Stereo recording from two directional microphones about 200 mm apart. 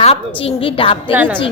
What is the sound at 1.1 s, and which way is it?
Speech, 10° right (ahead or behind).